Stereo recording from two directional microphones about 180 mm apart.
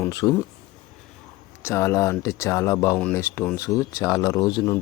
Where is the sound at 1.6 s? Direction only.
15° left (ahead or behind).